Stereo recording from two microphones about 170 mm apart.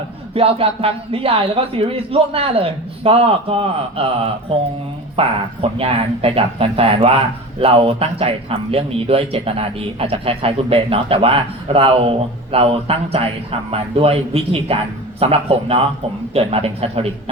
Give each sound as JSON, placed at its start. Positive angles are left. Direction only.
{"t": 0.3, "sound": "a man's voice", "side_deg": -35}